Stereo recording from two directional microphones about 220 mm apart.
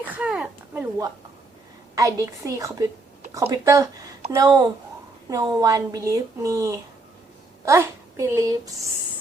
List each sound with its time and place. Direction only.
0.1 s a woman's voice: 5° right (ahead or behind)